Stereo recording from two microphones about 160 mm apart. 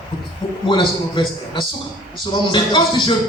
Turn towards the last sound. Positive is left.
turn(degrees=30)  # may be behind; listen again after turning